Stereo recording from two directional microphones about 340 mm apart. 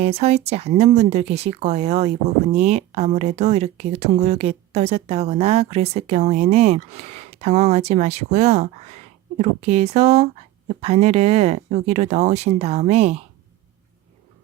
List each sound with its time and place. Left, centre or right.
0.0 s speech: centre